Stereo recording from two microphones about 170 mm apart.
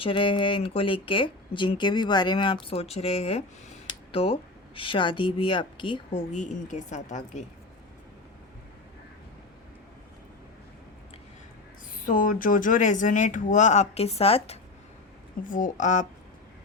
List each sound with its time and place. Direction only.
0.0 s speech: 30° left (ahead or behind); by 7.4 s 45° left (ahead or behind)
11.9 s speech: 55° left (ahead or behind); by 14.6 s 35° left (ahead or behind)
15.4 s speech: 50° left (ahead or behind)